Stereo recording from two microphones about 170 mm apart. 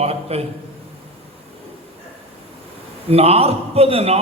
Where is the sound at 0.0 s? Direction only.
35° right (ahead or behind).